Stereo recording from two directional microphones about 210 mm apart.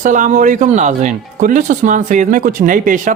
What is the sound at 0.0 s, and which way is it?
Speech, 35° right (ahead or behind).